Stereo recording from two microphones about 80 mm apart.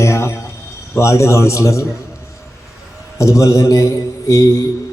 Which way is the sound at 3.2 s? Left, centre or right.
Left.